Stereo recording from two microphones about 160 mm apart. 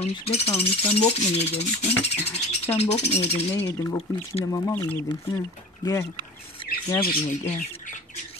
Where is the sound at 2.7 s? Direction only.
45° left (ahead or behind).